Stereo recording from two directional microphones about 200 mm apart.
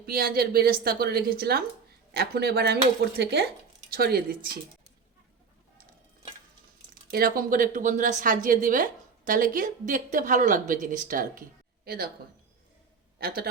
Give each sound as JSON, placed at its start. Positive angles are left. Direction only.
{"t": 0.0, "sound": "a woman's voice", "side_deg": -45}
{"t": 6.9, "sound": "a woman's voice", "side_deg": -45}
{"t": 13.1, "sound": "a man's voice", "side_deg": -50}